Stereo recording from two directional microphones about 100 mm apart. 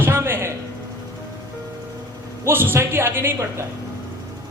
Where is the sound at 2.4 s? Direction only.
25° right (ahead or behind).